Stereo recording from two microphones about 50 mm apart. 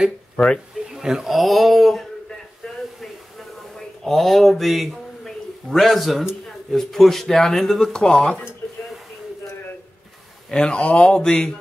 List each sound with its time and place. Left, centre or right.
0.8 s a sound: centre
1.3 s speech: centre
3.7 s speech: centre
5.2 s a sound: centre
6.7 s speech: centre
10.5 s speech: centre